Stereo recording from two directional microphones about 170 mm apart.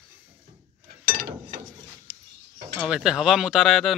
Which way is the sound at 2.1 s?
20° right (ahead or behind).